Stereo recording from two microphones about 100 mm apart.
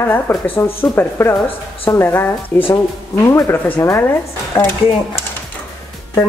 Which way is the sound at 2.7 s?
35° left (ahead or behind).